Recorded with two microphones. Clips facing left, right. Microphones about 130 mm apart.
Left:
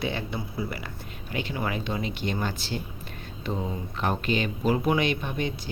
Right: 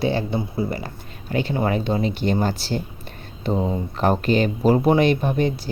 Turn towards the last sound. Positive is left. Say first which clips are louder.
# right 9 dB
turn(degrees=-35)  # may be behind; listen again after turning